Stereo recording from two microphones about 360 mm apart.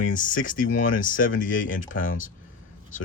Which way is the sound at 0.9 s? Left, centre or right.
Left.